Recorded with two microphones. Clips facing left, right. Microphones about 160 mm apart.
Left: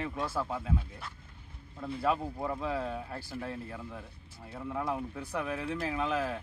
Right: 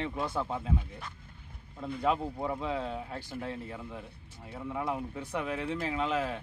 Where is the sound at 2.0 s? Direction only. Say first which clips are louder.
Right 1 dB; 20° right (ahead or behind).